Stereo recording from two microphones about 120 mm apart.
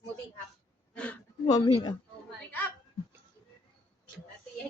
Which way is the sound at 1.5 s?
35° left (ahead or behind).